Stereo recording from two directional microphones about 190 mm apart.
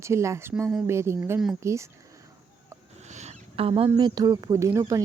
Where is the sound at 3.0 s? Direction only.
35° right (ahead or behind).